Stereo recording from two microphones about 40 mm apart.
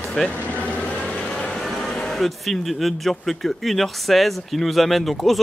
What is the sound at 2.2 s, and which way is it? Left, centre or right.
Speech, centre.